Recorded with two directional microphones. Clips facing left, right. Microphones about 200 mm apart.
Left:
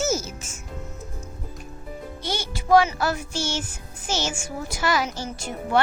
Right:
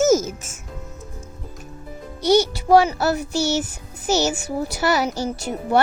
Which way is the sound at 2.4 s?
40° right (ahead or behind).